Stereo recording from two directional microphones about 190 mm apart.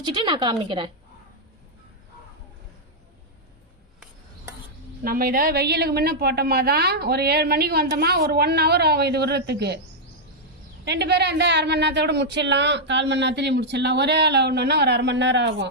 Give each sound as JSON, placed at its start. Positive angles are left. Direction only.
{"t": 0.0, "sound": "a woman's voice", "side_deg": -25}
{"t": 5.0, "sound": "a woman's voice", "side_deg": -50}
{"t": 10.8, "sound": "a woman's voice", "side_deg": -60}